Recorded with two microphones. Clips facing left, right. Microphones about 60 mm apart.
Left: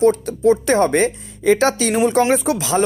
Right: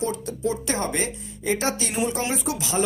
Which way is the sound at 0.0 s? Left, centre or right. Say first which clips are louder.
Left 12 dB; left.